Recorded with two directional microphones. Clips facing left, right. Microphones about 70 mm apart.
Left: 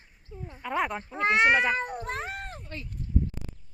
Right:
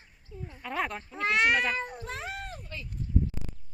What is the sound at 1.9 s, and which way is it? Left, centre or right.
Speech, left.